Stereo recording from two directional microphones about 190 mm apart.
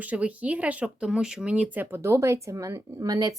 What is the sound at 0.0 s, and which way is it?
Speech, 5° right (ahead or behind).